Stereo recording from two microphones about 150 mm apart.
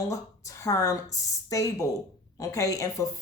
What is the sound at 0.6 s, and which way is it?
A woman's voice, 20° left (ahead or behind).